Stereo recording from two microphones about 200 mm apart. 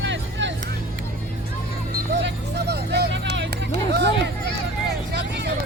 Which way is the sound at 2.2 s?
55° right (ahead or behind).